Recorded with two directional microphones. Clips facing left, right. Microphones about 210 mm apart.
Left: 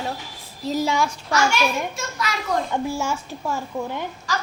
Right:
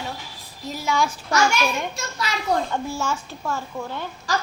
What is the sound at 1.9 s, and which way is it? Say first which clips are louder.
Speech: left 1 dB; 30° right (ahead or behind).